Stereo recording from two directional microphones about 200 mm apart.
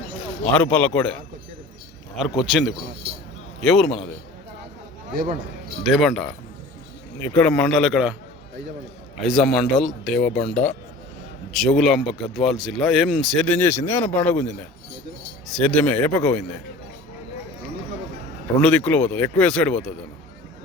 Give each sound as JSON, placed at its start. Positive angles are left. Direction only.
{"t": 0.4, "sound": "speech", "side_deg": 5}
{"t": 2.1, "sound": "speech", "side_deg": 0}
{"t": 5.1, "sound": "a man's voice", "side_deg": -45}
{"t": 6.0, "sound": "speech", "side_deg": 0}
{"t": 9.2, "sound": "speech", "side_deg": 0}
{"t": 18.9, "sound": "speech", "side_deg": 5}